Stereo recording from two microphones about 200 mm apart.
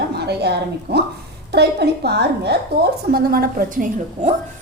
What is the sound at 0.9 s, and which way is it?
A woman's voice, 55° right (ahead or behind).